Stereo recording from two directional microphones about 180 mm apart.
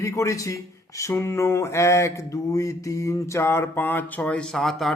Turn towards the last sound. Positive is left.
turn(degrees=0)  # may be behind; listen again after turning